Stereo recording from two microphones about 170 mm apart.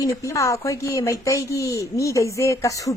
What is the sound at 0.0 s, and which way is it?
Speech, 20° left (ahead or behind).